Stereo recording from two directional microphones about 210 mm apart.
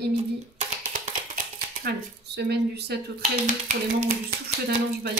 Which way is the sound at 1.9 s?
50° right (ahead or behind).